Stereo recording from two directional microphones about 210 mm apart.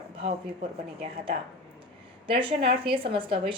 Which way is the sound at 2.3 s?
25° right (ahead or behind).